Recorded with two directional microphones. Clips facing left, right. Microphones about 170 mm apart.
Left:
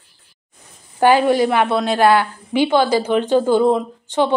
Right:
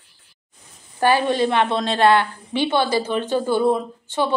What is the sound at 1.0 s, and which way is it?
A woman's voice, 15° left (ahead or behind).